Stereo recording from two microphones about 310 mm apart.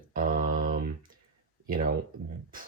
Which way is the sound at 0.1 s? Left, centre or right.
Right.